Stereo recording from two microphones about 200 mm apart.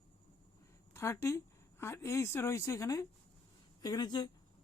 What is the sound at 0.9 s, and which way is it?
A woman's voice, 15° left (ahead or behind).